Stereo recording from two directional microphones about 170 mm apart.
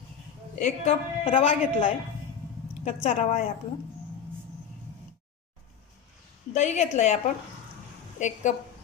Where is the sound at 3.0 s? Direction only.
45° left (ahead or behind).